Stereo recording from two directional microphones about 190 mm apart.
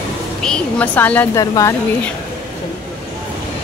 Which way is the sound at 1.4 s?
20° left (ahead or behind).